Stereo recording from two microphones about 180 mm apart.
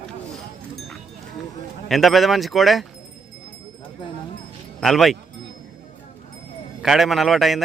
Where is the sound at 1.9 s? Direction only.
Centre (ahead or behind).